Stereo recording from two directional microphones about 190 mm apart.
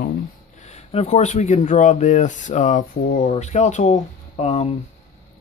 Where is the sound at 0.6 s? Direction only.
35° left (ahead or behind).